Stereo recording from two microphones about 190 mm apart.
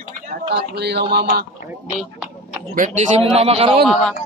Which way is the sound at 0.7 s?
60° right (ahead or behind).